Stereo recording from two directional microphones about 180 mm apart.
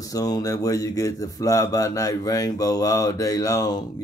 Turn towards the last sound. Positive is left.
turn(degrees=20)  # may be behind; listen again after turning